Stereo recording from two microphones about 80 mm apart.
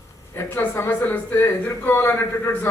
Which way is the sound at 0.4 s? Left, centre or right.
Left.